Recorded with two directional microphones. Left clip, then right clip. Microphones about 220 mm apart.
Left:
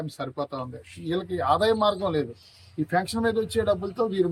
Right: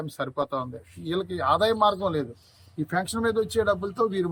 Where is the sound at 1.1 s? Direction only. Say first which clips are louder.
Even; 10° left (ahead or behind).